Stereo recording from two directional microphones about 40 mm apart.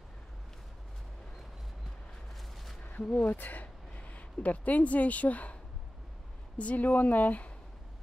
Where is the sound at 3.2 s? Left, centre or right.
Left.